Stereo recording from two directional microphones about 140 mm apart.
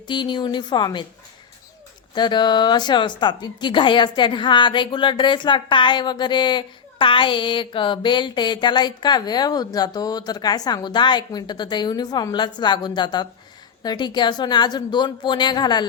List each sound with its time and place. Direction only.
0.1 s a woman's voice: 35° left (ahead or behind)
2.1 s a woman's voice: 30° left (ahead or behind)